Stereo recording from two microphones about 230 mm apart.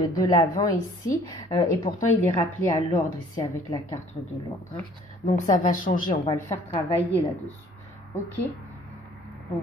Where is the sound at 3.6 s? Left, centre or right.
Centre.